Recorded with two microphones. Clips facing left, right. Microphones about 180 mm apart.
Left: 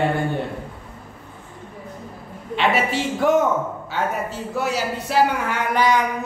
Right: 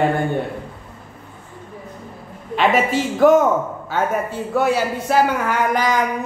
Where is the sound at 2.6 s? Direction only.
45° right (ahead or behind).